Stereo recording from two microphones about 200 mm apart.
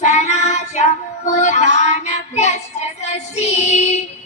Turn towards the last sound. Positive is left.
turn(degrees=35)  # may be behind; listen again after turning